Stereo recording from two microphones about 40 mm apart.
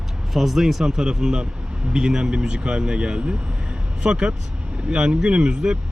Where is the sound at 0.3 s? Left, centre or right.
Centre.